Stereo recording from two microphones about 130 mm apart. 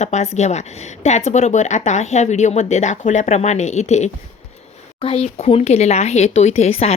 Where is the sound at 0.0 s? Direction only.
60° left (ahead or behind).